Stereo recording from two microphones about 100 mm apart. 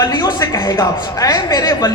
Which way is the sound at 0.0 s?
40° left (ahead or behind).